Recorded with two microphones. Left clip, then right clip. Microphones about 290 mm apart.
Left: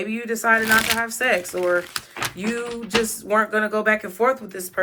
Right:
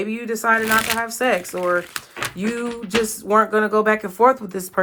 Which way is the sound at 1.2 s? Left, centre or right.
Centre.